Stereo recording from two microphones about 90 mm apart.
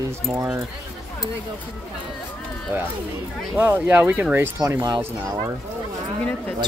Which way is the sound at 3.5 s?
20° right (ahead or behind).